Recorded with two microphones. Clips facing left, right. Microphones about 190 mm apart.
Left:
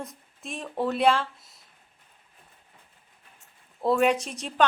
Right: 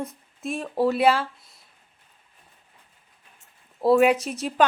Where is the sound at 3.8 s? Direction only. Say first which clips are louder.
Right 5 dB; 5° right (ahead or behind).